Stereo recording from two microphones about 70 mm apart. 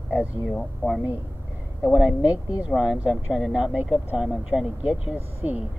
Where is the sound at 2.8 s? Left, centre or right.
Centre.